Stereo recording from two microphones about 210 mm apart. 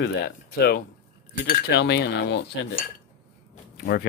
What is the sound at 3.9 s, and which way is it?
Speech, 45° left (ahead or behind).